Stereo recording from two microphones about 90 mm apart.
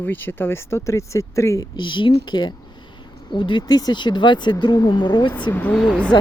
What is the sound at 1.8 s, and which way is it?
Speech, 65° left (ahead or behind).